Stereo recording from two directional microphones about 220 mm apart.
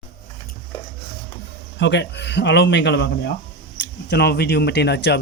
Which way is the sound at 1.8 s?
50° left (ahead or behind).